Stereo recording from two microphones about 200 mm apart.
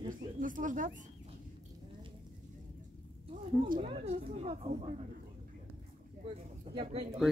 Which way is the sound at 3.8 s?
30° right (ahead or behind).